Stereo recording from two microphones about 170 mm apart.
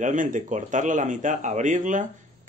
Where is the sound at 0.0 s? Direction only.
50° right (ahead or behind).